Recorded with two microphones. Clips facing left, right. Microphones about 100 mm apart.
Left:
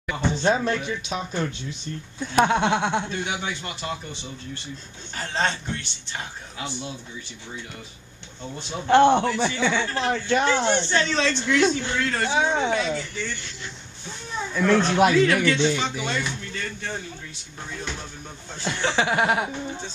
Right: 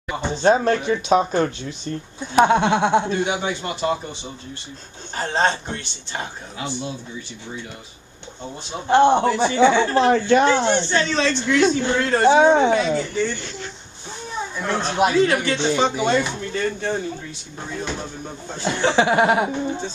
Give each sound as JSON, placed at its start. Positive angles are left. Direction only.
{"t": 0.0, "sound": "a sound", "side_deg": -25}
{"t": 0.4, "sound": "speech", "side_deg": -40}
{"t": 2.1, "sound": "speech", "side_deg": -15}
{"t": 5.1, "sound": "speech", "side_deg": -35}
{"t": 8.4, "sound": "speech", "side_deg": -20}
{"t": 10.1, "sound": "speech", "side_deg": -55}
{"t": 11.2, "sound": "speech", "side_deg": -35}
{"t": 12.3, "sound": "speech", "side_deg": -50}
{"t": 12.7, "sound": "speech", "side_deg": -35}
{"t": 14.4, "sound": "speech", "side_deg": -20}
{"t": 18.9, "sound": "speech", "side_deg": -20}